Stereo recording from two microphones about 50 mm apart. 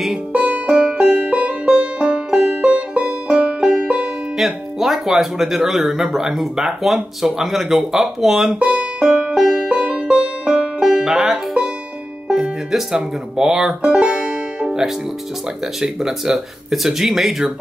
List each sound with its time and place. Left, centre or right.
0.3 s music: right
4.4 s speech: centre
8.5 s music: right
11.1 s banjo: centre
12.3 s speech: centre
14.0 s music: centre
15.8 s speech: centre